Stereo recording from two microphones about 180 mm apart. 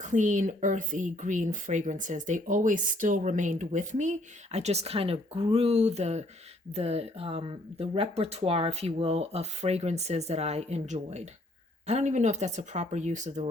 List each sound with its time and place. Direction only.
0.0 s speech: 45° right (ahead or behind)